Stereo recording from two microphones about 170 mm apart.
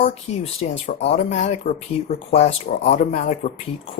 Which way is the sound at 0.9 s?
40° left (ahead or behind).